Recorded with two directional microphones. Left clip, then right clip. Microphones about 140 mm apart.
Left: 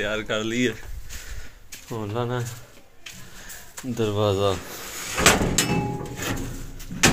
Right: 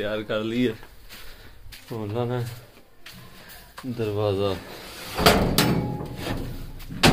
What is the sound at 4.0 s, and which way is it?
Speech, 35° left (ahead or behind).